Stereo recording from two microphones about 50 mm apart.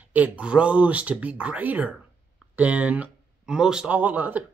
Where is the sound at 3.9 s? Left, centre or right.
Right.